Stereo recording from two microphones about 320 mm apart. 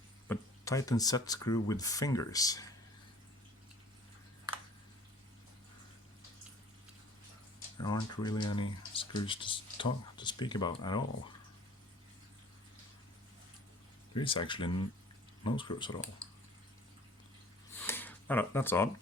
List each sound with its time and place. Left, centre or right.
0.3 s speech: centre
7.8 s speech: centre
14.1 s speech: centre
17.7 s a sound: centre